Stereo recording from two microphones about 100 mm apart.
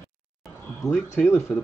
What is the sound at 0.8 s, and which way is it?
Speech, 25° left (ahead or behind).